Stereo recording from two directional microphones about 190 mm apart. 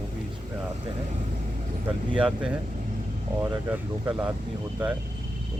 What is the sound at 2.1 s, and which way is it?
Speech, 5° right (ahead or behind).